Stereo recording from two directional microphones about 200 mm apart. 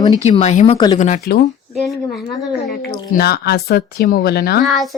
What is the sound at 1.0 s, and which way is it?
Speech, 35° left (ahead or behind).